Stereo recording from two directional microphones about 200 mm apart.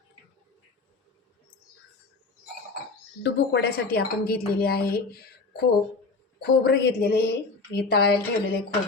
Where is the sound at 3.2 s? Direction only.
55° left (ahead or behind).